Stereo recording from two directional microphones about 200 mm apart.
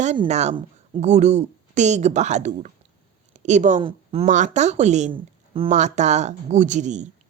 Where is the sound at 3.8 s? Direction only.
25° right (ahead or behind).